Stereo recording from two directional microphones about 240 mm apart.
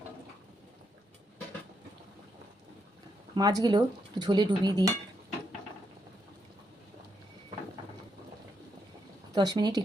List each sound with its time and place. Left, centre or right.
3.3 s speech: centre
9.3 s speech: centre